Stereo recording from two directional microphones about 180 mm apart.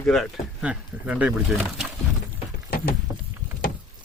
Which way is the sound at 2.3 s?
55° left (ahead or behind).